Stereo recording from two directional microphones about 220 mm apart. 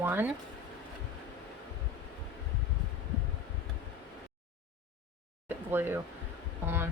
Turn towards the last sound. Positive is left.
turn(degrees=-10)  # may be behind; listen again after turning